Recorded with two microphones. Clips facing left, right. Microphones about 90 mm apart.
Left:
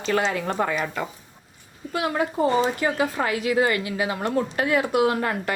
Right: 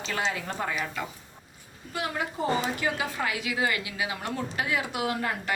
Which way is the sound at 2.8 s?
40° left (ahead or behind).